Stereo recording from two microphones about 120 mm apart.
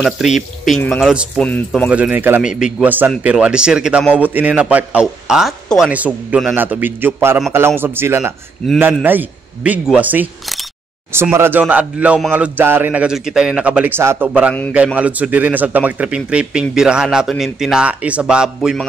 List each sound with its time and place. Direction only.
0.0 s speech: 5° right (ahead or behind)
11.3 s speech: 20° right (ahead or behind)